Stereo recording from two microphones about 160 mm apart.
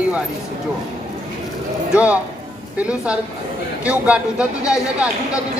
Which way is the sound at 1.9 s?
5° right (ahead or behind).